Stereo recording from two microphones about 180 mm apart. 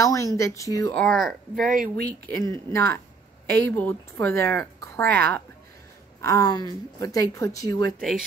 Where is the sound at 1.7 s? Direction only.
50° right (ahead or behind).